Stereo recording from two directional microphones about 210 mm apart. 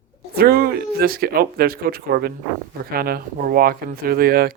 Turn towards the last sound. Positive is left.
turn(degrees=-45)  # may be behind; listen again after turning